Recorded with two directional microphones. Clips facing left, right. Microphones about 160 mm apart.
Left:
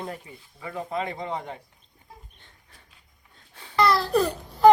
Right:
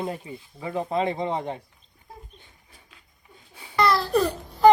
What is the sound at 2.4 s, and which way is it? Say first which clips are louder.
Dog: right 1 dB; 10° right (ahead or behind).